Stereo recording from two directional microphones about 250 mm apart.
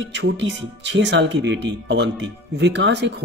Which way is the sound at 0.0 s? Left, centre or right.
Right.